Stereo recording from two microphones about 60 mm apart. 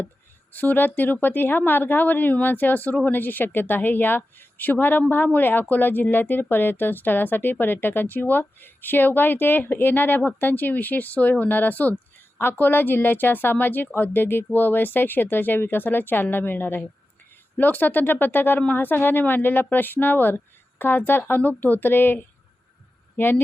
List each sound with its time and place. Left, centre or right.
0.5 s a woman's voice: left